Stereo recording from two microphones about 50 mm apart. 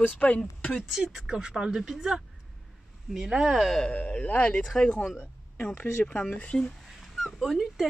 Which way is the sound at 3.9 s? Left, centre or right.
Left.